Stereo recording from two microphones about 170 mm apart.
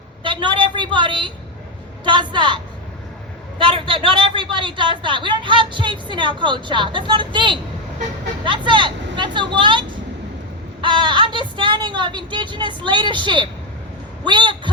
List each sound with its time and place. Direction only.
0.2 s a sound: 30° right (ahead or behind)
2.0 s a woman's voice: 25° right (ahead or behind)
3.6 s a woman's voice: 30° right (ahead or behind)